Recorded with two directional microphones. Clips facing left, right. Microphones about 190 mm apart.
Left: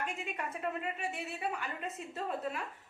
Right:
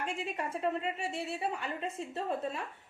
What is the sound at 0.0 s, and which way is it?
A woman's voice, 30° right (ahead or behind).